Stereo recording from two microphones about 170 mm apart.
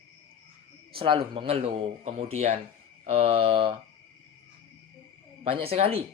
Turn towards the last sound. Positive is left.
turn(degrees=-35)  # may be behind; listen again after turning